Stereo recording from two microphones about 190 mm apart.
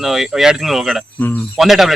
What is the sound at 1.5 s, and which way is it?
Speech, centre (ahead or behind).